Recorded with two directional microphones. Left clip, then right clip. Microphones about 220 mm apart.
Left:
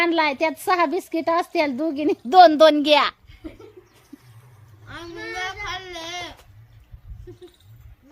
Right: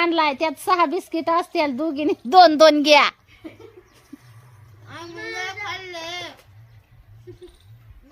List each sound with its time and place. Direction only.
0.0 s a woman's voice: 10° right (ahead or behind); by 3.2 s 25° right (ahead or behind)
4.9 s speech: 20° left (ahead or behind)
7.3 s a sound: 20° left (ahead or behind)